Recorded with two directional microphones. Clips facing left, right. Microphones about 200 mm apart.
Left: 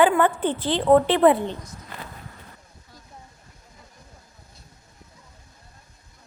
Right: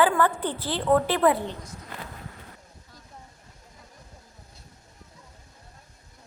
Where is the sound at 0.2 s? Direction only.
25° left (ahead or behind).